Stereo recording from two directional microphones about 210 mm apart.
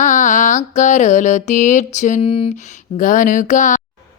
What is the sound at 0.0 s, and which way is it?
Mantra, 35° left (ahead or behind).